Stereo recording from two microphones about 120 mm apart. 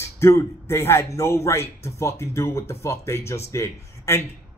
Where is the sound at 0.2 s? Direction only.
25° left (ahead or behind).